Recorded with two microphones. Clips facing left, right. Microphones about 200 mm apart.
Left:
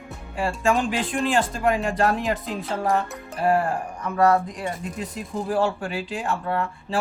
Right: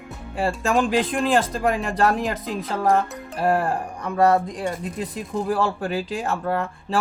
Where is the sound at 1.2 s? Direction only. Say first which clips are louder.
Right 2 dB; 50° right (ahead or behind).